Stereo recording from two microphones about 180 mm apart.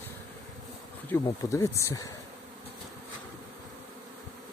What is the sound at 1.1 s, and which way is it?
Speech, 15° left (ahead or behind).